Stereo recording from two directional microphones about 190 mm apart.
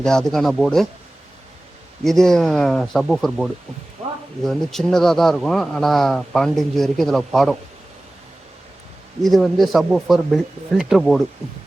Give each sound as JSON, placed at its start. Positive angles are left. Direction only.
{"t": 0.0, "sound": "speech", "side_deg": 5}
{"t": 2.0, "sound": "speech", "side_deg": 0}
{"t": 9.2, "sound": "speech", "side_deg": 0}